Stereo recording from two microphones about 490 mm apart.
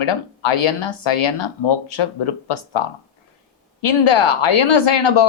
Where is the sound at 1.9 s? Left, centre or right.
Left.